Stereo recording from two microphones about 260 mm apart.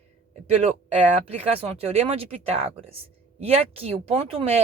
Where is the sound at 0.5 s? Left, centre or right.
Right.